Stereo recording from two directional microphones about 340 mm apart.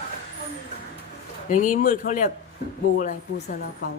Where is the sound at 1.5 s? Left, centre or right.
Left.